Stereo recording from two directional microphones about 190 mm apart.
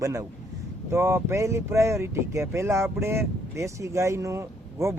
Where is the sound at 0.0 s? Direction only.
15° right (ahead or behind).